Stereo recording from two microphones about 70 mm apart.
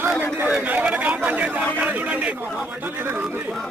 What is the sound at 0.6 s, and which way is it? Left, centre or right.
Chatter, right.